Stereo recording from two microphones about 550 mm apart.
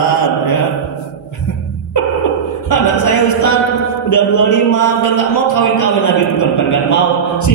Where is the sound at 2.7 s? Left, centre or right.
Left.